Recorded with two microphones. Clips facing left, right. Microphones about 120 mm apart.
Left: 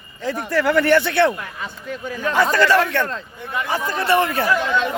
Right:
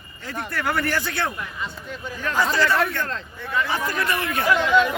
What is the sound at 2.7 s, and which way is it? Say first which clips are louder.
Speech: left 5 dB; 90° left.